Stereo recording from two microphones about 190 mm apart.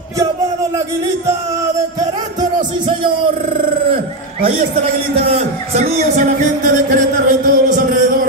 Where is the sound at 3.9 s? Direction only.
30° right (ahead or behind).